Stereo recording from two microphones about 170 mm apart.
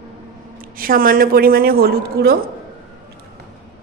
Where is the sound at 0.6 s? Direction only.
55° right (ahead or behind).